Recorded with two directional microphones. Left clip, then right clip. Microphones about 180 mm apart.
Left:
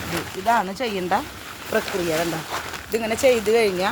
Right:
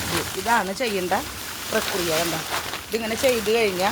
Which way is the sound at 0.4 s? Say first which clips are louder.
Left 2 dB; 65° left (ahead or behind).